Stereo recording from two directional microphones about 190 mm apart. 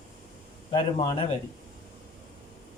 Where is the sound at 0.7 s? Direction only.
25° left (ahead or behind).